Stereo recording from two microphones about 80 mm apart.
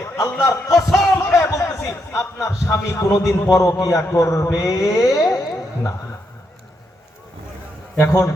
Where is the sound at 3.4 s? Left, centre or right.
Left.